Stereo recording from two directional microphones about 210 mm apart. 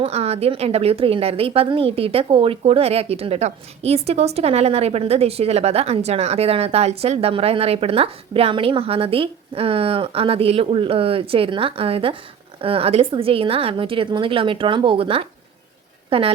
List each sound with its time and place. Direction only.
0.0 s a woman's voice: 30° right (ahead or behind)